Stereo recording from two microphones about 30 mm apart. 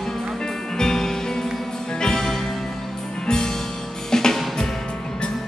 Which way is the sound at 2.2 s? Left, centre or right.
Centre.